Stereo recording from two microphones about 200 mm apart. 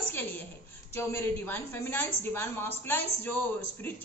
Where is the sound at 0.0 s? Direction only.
10° left (ahead or behind).